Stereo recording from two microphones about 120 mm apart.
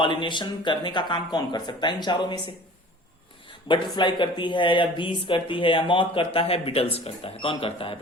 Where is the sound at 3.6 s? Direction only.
40° left (ahead or behind).